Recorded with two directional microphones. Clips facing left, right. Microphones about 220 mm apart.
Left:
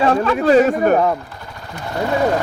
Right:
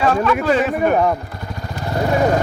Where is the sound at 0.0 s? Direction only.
30° left (ahead or behind).